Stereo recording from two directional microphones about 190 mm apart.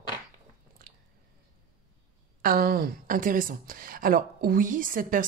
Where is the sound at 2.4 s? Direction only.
50° right (ahead or behind).